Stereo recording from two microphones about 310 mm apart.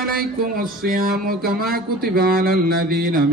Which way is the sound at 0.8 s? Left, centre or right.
Right.